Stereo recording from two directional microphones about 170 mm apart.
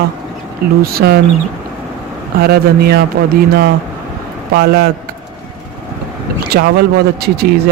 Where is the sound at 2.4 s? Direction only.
65° right (ahead or behind).